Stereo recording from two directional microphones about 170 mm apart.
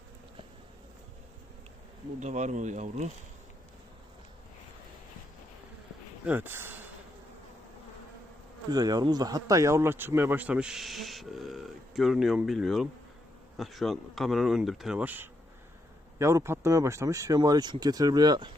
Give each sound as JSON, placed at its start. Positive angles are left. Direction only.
{"t": 2.2, "sound": "speech", "side_deg": -45}
{"t": 6.2, "sound": "speech", "side_deg": -10}
{"t": 8.7, "sound": "speech", "side_deg": -25}